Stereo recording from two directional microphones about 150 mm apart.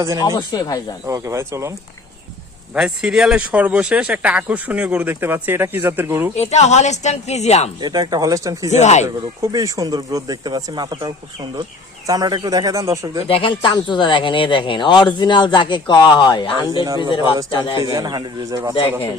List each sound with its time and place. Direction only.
0.0 s speech: 20° right (ahead or behind)
0.3 s speech: 25° left (ahead or behind)
1.0 s speech: 20° right (ahead or behind)
2.7 s speech: 5° right (ahead or behind)
6.3 s a woman's voice: 45° left (ahead or behind)
7.8 s speech: 30° right (ahead or behind)
8.7 s a woman's voice: 50° left (ahead or behind)
9.0 s speech: 25° right (ahead or behind)
13.2 s speech: 35° left (ahead or behind)
17.9 s speech: 30° right (ahead or behind)